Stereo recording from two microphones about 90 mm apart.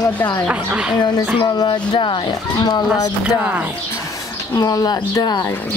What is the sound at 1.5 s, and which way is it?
Speech, 55° left (ahead or behind).